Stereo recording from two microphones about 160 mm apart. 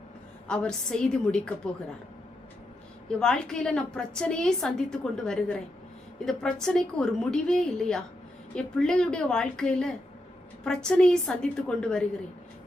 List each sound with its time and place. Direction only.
0.4 s a woman's voice: 5° left (ahead or behind)
3.2 s a woman's voice: 5° left (ahead or behind)